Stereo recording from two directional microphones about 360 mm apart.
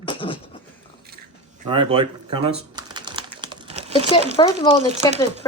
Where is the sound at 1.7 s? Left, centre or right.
Centre.